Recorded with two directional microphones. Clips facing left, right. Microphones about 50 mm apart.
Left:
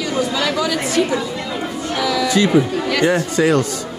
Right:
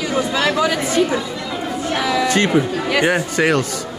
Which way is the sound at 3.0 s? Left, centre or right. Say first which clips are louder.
Left 2 dB; right.